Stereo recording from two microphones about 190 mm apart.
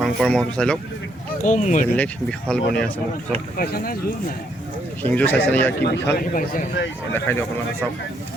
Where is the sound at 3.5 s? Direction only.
50° left (ahead or behind).